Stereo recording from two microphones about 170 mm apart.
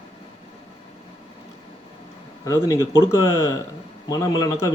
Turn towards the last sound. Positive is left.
turn(degrees=20)  # may be behind; listen again after turning